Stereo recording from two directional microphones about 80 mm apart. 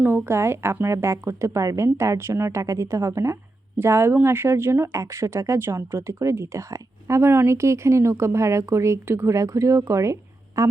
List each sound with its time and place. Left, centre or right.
0.0 s speech: right